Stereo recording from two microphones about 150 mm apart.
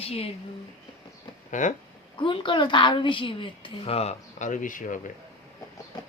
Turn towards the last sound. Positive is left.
turn(degrees=60)  # may be behind; listen again after turning